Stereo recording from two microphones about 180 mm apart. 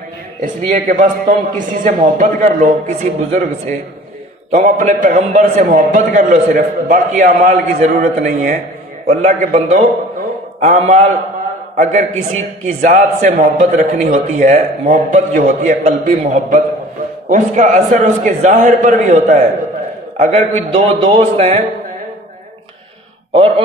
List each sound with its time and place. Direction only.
0.7 s a man's voice: 45° right (ahead or behind)
4.5 s a man's voice: 45° right (ahead or behind)